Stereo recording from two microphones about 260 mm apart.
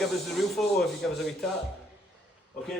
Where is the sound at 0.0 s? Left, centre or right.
Centre.